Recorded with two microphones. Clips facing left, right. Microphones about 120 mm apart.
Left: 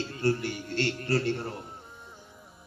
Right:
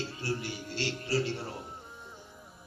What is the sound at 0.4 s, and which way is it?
Speech, 55° left (ahead or behind).